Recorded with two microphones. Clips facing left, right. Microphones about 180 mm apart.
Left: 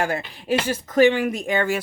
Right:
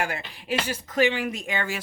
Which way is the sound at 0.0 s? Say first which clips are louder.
Left 5 dB; 40° left (ahead or behind).